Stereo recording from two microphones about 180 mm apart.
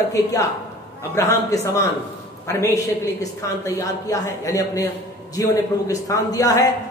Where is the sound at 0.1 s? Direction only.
20° left (ahead or behind).